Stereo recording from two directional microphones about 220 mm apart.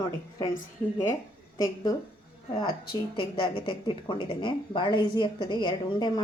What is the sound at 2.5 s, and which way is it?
A woman's voice, 20° left (ahead or behind).